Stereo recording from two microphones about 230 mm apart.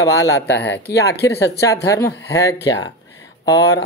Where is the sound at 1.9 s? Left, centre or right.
Centre.